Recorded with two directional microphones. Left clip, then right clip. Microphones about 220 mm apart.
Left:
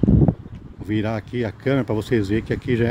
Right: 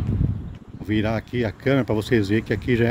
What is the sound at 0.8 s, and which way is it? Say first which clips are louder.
Speech: right 1 dB; centre (ahead or behind).